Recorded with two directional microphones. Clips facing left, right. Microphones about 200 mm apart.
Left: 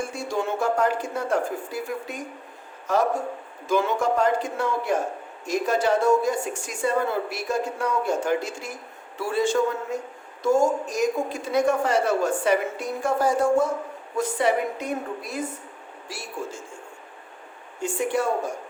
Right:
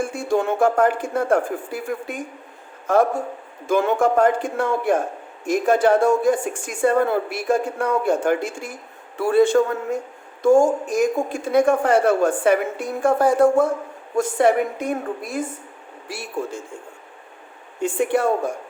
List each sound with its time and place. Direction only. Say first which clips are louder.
0.0 s a woman's voice: right 6 dB; 50° right (ahead or behind)
17.7 s a woman's voice: right 5 dB; 60° right (ahead or behind)